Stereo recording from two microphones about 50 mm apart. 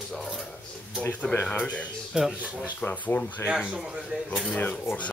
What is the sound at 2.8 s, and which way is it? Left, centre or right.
Speech, left.